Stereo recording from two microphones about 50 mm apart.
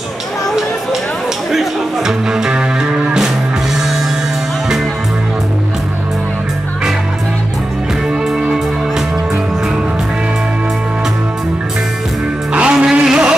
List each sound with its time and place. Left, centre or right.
1.5 s music: centre
12.5 s music: right